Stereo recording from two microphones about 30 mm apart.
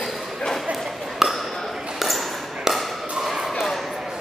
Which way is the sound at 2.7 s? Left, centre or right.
Centre.